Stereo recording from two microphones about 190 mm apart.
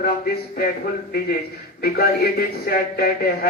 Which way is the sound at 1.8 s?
55° left (ahead or behind).